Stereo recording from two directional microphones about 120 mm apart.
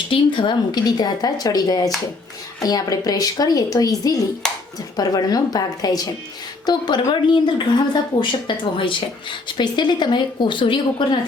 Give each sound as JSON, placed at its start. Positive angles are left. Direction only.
{"t": 0.1, "sound": "speech", "side_deg": 45}
{"t": 4.4, "sound": "a sound", "side_deg": 5}
{"t": 4.9, "sound": "speech", "side_deg": 30}